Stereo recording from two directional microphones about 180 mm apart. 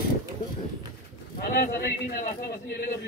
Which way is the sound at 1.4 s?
60° left (ahead or behind).